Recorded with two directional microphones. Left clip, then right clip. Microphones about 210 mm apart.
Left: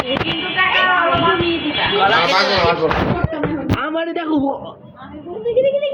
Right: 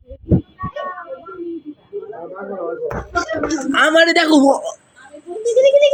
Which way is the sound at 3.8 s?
50° right (ahead or behind).